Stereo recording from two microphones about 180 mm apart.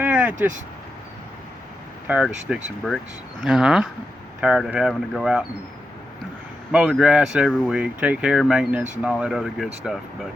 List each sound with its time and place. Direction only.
0.0 s vehicle: 10° right (ahead or behind)
0.3 s speech: 45° right (ahead or behind)
2.0 s speech: 5° right (ahead or behind)
6.7 s speech: 5° right (ahead or behind)